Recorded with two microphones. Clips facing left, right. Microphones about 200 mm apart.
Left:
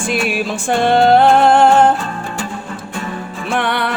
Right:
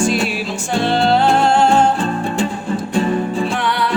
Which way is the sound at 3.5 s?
60° left (ahead or behind).